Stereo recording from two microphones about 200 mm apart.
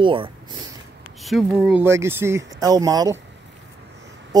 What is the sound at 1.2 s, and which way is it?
Speech, centre (ahead or behind).